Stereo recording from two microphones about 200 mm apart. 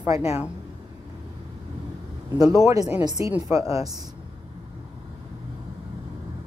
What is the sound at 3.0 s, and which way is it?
Speech, 20° right (ahead or behind).